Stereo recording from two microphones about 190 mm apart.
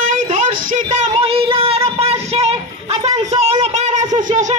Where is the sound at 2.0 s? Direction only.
30° right (ahead or behind).